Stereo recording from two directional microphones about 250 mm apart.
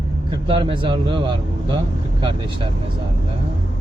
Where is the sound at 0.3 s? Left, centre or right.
Centre.